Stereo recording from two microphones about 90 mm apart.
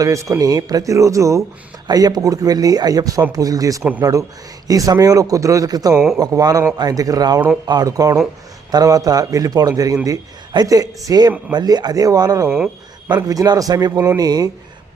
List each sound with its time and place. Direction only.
0.0 s speech: 35° right (ahead or behind)
1.9 s a man's voice: 50° right (ahead or behind)
5.9 s speech: 5° right (ahead or behind)
6.1 s a man's voice: 45° right (ahead or behind)
12.5 s speech: 10° right (ahead or behind)
13.1 s a man's voice: 40° right (ahead or behind)